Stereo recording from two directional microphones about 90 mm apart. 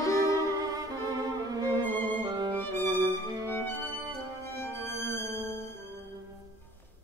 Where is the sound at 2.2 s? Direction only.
55° right (ahead or behind).